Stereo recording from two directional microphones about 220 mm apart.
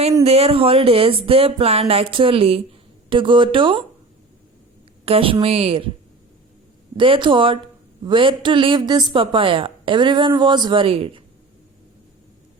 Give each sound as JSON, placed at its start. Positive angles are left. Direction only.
{"t": 0.0, "sound": "a woman's voice", "side_deg": -30}
{"t": 5.0, "sound": "a woman's voice", "side_deg": -25}
{"t": 6.9, "sound": "a woman's voice", "side_deg": -25}